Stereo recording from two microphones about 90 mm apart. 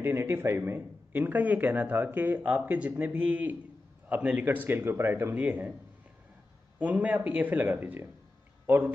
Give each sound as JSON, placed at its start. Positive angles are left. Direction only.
{"t": 0.0, "sound": "speech", "side_deg": -30}
{"t": 6.8, "sound": "speech", "side_deg": -15}